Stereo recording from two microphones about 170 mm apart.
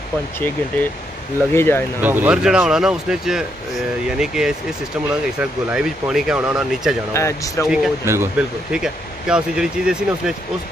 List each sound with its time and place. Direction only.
1.5 s speech: 15° left (ahead or behind)
2.0 s speech: 10° right (ahead or behind)
7.2 s speech: 15° left (ahead or behind)
7.6 s speech: centre (ahead or behind)
8.0 s speech: 15° right (ahead or behind)